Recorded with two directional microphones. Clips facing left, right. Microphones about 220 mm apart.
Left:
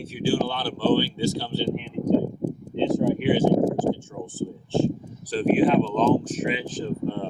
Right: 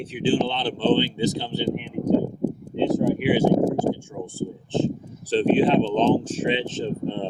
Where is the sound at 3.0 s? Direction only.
5° right (ahead or behind).